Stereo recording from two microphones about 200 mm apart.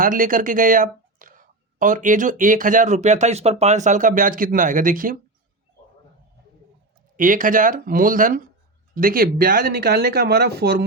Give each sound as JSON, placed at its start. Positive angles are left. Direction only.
{"t": 0.0, "sound": "speech", "side_deg": -45}
{"t": 7.2, "sound": "speech", "side_deg": -40}